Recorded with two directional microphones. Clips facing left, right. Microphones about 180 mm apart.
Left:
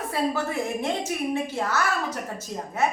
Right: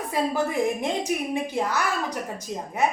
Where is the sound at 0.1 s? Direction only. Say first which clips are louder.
Right 2 dB; 15° right (ahead or behind).